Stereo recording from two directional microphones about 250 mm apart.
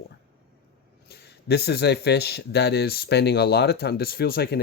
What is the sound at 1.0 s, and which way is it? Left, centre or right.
Speech, left.